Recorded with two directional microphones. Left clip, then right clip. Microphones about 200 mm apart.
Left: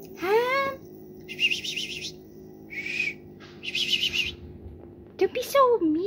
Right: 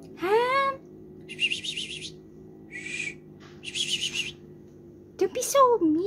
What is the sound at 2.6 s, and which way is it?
Owl, 10° right (ahead or behind).